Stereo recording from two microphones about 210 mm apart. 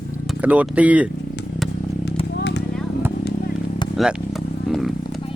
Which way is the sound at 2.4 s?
55° left (ahead or behind).